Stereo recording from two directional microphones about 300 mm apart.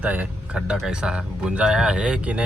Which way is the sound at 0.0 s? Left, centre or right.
Centre.